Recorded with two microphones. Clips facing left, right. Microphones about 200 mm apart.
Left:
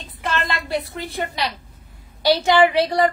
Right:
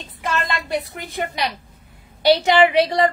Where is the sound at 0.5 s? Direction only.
20° right (ahead or behind).